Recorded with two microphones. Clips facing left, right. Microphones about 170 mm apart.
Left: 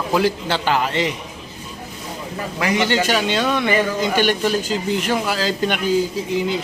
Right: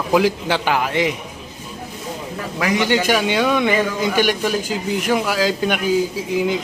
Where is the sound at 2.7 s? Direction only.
15° right (ahead or behind).